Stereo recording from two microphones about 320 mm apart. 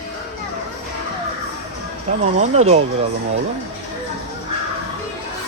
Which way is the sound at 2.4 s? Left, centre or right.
Centre.